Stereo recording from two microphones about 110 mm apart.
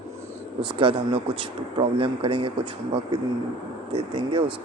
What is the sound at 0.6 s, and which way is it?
Speech, 50° right (ahead or behind).